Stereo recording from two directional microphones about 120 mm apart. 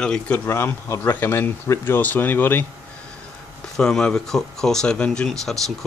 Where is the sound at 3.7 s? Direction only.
5° left (ahead or behind).